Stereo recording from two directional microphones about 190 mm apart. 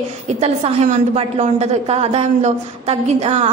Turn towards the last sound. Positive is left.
turn(degrees=-35)  # may be behind; listen again after turning